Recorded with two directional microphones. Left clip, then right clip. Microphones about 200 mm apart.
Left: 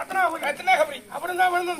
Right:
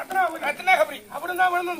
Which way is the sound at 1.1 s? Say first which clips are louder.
Even; 20° left (ahead or behind).